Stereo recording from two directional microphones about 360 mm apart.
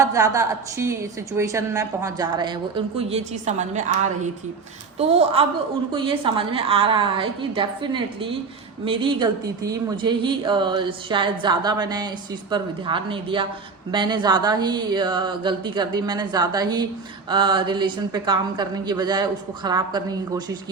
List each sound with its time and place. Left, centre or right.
0.0 s speech: centre